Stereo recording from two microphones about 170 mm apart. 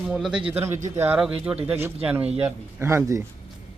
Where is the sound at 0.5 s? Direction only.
15° right (ahead or behind).